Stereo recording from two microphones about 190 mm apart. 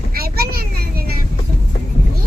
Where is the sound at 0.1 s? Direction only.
50° right (ahead or behind).